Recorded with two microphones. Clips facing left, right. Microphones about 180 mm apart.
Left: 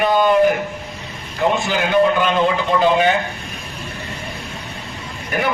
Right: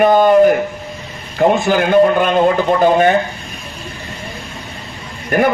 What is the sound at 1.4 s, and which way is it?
A man's voice, 55° right (ahead or behind).